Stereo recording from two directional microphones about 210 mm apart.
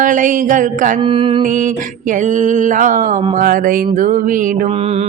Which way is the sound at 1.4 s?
40° right (ahead or behind).